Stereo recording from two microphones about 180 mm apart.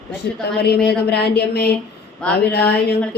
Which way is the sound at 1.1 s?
65° left (ahead or behind).